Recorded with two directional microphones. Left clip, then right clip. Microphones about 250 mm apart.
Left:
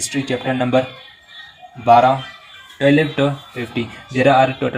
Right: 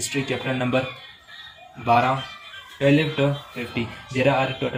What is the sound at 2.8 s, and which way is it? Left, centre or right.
Speech, left.